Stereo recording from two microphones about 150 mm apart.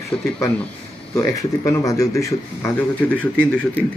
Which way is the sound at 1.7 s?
20° left (ahead or behind).